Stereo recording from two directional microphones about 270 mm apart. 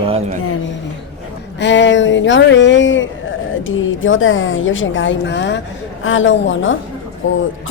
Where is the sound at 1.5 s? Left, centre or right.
Left.